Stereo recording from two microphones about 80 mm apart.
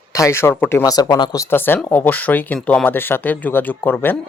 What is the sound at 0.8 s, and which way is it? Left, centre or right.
Speech, left.